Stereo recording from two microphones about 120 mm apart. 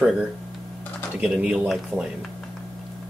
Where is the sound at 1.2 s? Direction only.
5° right (ahead or behind).